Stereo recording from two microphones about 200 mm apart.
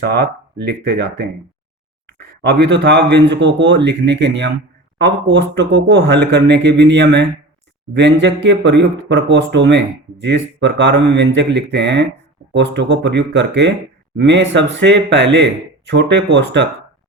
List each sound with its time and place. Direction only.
0.9 s speech: 55° right (ahead or behind)